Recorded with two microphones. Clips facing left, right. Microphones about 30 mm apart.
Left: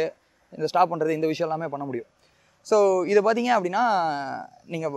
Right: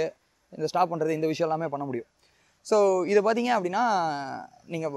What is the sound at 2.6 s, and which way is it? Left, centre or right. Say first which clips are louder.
Speech: left 2 dB; left.